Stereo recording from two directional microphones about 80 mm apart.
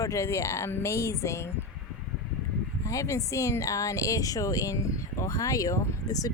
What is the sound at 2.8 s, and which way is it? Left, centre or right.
Speech, left.